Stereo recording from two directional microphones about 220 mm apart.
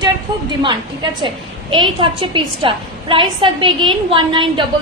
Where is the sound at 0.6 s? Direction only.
20° right (ahead or behind).